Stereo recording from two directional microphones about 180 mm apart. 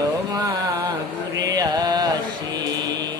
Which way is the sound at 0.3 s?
20° right (ahead or behind).